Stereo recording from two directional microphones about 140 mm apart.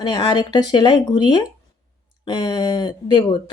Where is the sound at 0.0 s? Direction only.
30° left (ahead or behind).